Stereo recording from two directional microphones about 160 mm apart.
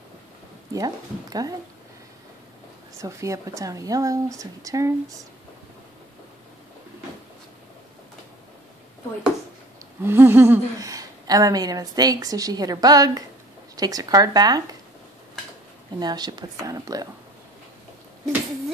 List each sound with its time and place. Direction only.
0.7 s speech: 25° right (ahead or behind)
3.0 s speech: 20° right (ahead or behind)
10.0 s speech: 15° right (ahead or behind)
16.0 s speech: 25° right (ahead or behind)